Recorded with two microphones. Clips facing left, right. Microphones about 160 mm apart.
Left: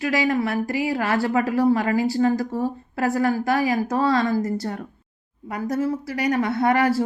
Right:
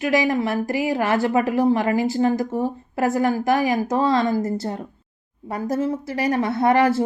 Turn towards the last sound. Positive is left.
turn(degrees=-25)  # may be behind; listen again after turning